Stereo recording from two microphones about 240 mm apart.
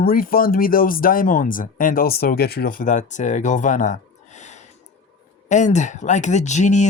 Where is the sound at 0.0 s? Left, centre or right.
Left.